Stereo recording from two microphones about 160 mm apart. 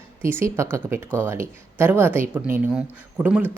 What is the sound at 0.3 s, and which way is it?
Speech, 15° right (ahead or behind).